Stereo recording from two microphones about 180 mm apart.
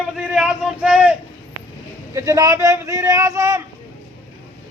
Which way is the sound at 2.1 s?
15° right (ahead or behind).